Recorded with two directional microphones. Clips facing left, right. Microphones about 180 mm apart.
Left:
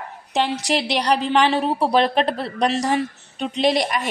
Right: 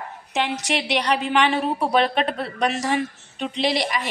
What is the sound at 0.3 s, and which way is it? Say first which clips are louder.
A woman's voice: left 3 dB; 35° left (ahead or behind).